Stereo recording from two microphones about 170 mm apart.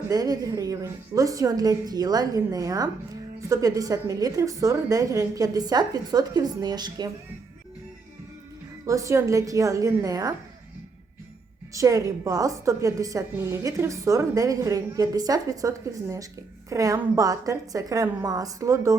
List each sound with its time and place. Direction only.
0.1 s a woman's voice: 20° right (ahead or behind)
8.9 s a woman's voice: 20° right (ahead or behind)
11.7 s a woman's voice: 20° right (ahead or behind)